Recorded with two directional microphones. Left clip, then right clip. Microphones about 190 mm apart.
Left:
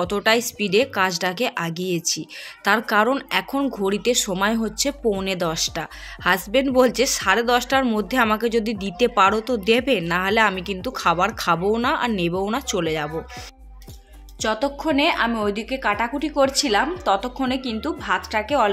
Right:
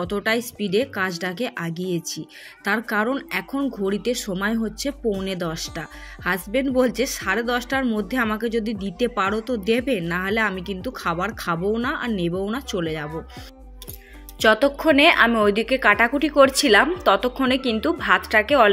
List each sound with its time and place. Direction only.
0.0 s a woman's voice: 25° right (ahead or behind)
14.4 s a woman's voice: 15° right (ahead or behind)